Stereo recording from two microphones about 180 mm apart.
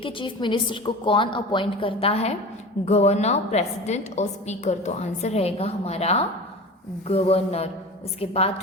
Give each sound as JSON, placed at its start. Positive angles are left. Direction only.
{"t": 0.0, "sound": "a woman's voice", "side_deg": 25}